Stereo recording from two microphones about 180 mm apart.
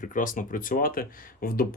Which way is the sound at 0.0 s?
45° left (ahead or behind).